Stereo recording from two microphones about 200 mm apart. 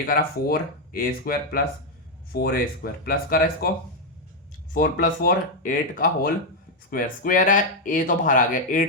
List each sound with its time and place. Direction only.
0.0 s speech: 50° left (ahead or behind)
4.7 s speech: 45° left (ahead or behind)